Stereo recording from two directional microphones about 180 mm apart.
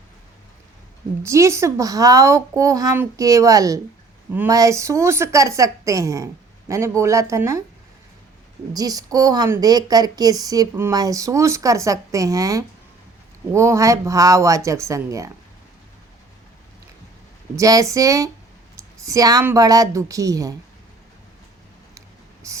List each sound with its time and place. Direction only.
1.2 s a woman's voice: 15° right (ahead or behind)
8.7 s a woman's voice: 20° right (ahead or behind)
17.5 s a woman's voice: 20° right (ahead or behind)
22.4 s a woman's voice: 15° right (ahead or behind)